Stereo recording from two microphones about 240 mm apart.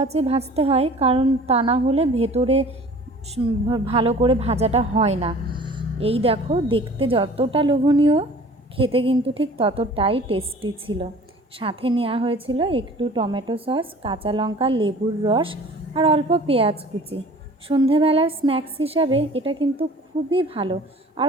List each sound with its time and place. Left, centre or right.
0.0 s a woman's voice: right